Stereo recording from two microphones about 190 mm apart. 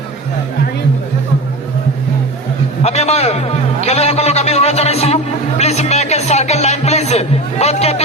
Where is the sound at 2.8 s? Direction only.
35° left (ahead or behind).